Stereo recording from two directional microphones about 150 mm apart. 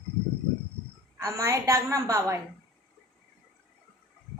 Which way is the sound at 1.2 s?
20° right (ahead or behind).